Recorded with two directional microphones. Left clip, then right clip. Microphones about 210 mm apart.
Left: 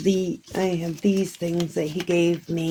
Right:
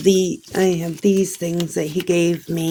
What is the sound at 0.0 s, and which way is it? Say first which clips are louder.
Speech: right 7 dB; 25° right (ahead or behind).